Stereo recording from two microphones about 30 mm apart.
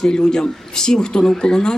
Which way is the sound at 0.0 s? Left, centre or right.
Left.